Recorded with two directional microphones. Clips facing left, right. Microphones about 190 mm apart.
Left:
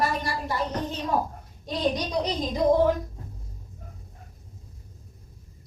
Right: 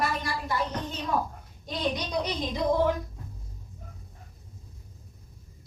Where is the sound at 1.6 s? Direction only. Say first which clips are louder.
Left 4 dB; 35° left (ahead or behind).